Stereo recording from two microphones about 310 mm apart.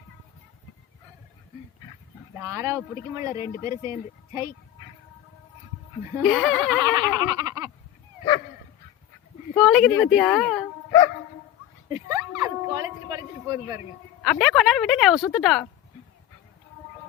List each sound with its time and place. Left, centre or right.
2.3 s speech: centre
6.1 s speech: centre
6.8 s laughter: centre
9.6 s speech: centre
11.9 s a sound: centre
12.4 s howl: centre
14.2 s speech: centre